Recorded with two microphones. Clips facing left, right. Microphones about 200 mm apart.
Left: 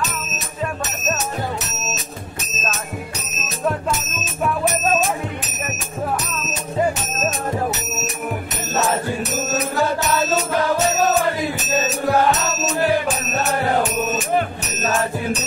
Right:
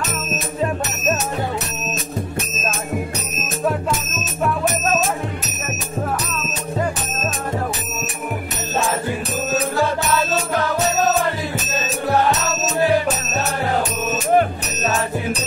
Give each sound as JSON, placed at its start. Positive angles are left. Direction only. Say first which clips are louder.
{"t": 14.3, "sound": "music", "louder": "right 4 dB", "side_deg": -40}